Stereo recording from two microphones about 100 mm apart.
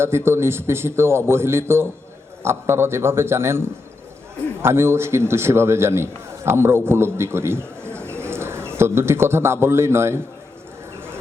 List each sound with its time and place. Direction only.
0.0 s a man's voice: 25° right (ahead or behind)